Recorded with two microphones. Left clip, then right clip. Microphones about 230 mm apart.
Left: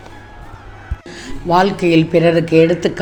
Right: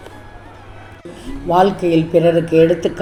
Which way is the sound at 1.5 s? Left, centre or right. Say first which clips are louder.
Left 1 dB; left.